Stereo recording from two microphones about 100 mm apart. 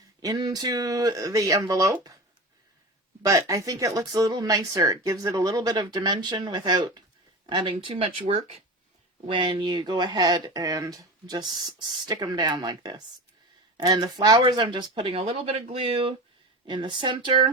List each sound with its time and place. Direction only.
0.2 s speech: 40° right (ahead or behind)
3.2 s speech: 30° right (ahead or behind); by 8.6 s 80° right
9.2 s speech: 60° right (ahead or behind)